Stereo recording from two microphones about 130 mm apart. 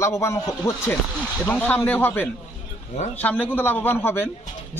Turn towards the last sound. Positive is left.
turn(degrees=15)  # may be behind; listen again after turning